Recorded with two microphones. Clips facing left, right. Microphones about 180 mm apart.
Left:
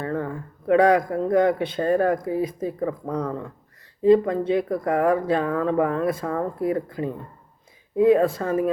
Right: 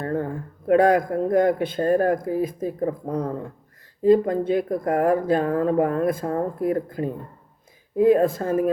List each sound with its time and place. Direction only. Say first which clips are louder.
0.0 s speech: right 1 dB; 50° right (ahead or behind)